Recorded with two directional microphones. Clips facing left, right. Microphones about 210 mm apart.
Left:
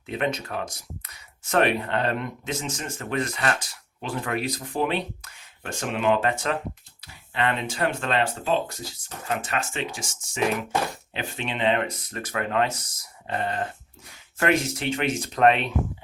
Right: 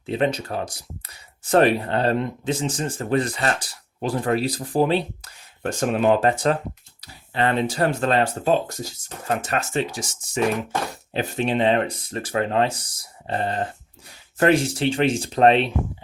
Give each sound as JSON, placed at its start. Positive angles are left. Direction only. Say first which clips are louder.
{"t": 0.0, "sound": "speech", "louder": "right 5 dB", "side_deg": -30}